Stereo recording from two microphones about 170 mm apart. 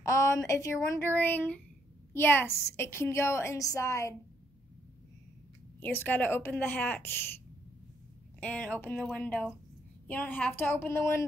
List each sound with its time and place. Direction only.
0.0 s a woman's voice: 20° left (ahead or behind)
5.8 s a woman's voice: 15° left (ahead or behind)
8.4 s a woman's voice: 10° left (ahead or behind)